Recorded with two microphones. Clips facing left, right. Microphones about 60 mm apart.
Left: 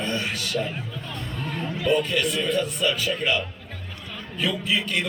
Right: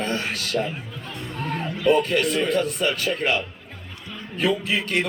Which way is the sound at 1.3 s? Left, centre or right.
Right.